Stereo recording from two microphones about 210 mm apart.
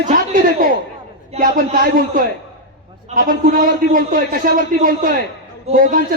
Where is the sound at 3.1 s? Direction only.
40° right (ahead or behind).